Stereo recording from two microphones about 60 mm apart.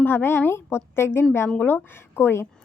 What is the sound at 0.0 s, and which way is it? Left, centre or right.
A woman's voice, left.